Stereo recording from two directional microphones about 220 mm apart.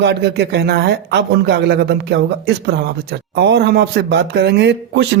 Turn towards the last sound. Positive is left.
turn(degrees=-50)  # may be behind; listen again after turning